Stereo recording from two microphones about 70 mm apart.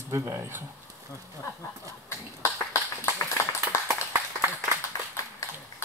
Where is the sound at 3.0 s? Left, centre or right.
Left.